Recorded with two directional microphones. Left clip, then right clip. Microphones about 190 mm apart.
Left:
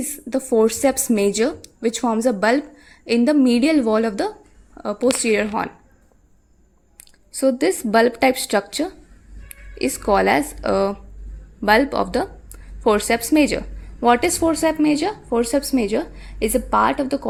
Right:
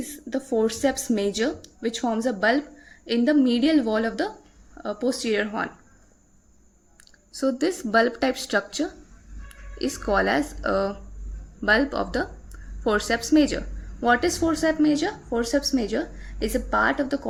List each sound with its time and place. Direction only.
0.0 s a woman's voice: 35° left (ahead or behind)
7.3 s a woman's voice: 20° left (ahead or behind)